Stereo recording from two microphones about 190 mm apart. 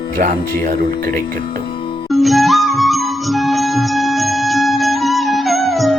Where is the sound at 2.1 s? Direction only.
Centre (ahead or behind).